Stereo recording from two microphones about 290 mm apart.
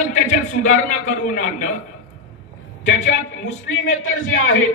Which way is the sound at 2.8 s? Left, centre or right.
Left.